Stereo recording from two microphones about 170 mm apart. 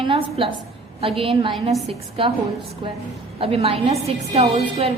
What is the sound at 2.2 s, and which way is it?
Speech, 30° right (ahead or behind).